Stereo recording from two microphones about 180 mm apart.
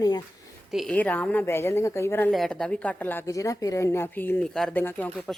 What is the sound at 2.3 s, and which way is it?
A woman's voice, centre (ahead or behind).